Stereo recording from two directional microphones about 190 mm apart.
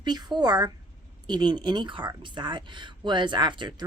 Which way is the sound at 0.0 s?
20° right (ahead or behind).